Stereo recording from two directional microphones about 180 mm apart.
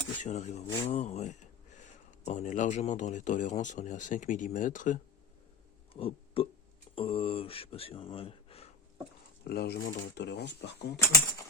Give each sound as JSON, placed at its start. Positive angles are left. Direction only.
{"t": 0.2, "sound": "speech", "side_deg": 40}
{"t": 5.9, "sound": "speech", "side_deg": 30}
{"t": 9.4, "sound": "speech", "side_deg": 60}